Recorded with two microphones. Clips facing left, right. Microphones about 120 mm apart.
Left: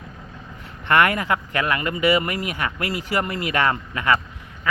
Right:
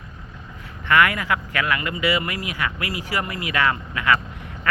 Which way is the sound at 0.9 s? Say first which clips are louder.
Left 1 dB; 30° left (ahead or behind).